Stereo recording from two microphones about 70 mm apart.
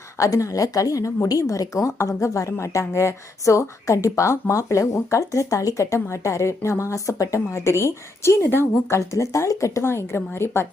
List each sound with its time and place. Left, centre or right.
0.2 s a woman's voice: left
8.4 s a woman's voice: left
9.0 s a woman's voice: left